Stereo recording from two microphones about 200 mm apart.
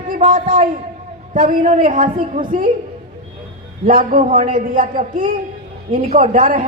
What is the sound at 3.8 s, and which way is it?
A woman's voice, 40° right (ahead or behind).